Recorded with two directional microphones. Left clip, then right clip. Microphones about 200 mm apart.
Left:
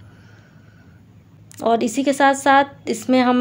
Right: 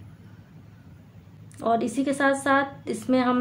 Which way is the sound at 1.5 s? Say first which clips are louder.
Left 6 dB; 25° left (ahead or behind).